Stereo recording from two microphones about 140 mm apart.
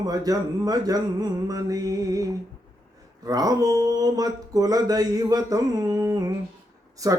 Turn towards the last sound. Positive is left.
turn(degrees=-25)  # may be behind; listen again after turning